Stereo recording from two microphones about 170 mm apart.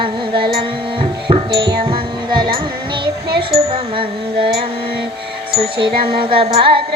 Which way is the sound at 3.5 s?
35° right (ahead or behind).